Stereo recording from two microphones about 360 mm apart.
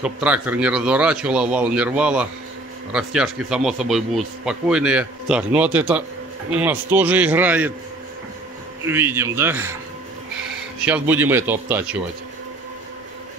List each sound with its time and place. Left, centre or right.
0.0 s speech: centre
8.8 s a man's voice: centre
10.9 s speech: centre